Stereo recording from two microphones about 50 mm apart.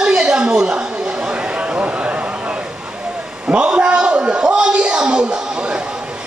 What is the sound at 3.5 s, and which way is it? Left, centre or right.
A man's voice, centre.